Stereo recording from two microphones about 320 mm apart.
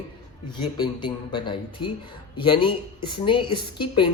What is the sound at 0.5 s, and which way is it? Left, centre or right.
Speech, centre.